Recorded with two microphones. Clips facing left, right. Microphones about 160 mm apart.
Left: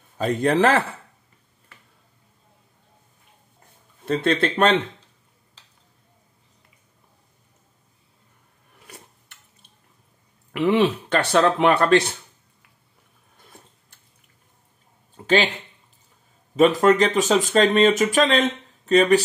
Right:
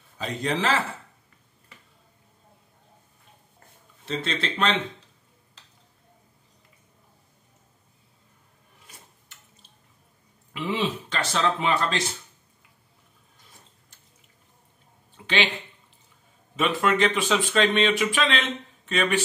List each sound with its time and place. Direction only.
0.2 s speech: 50° left (ahead or behind)
4.0 s speech: 55° left (ahead or behind)
8.8 s a sound: 65° left (ahead or behind)
10.5 s speech: 60° left (ahead or behind)
15.1 s a sound: 45° left (ahead or behind)
16.5 s speech: 40° left (ahead or behind)